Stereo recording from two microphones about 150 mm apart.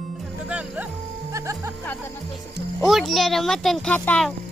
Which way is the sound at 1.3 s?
20° right (ahead or behind).